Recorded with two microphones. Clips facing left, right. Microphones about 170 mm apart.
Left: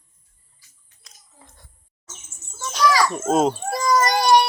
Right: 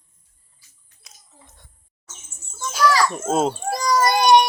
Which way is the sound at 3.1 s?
Centre (ahead or behind).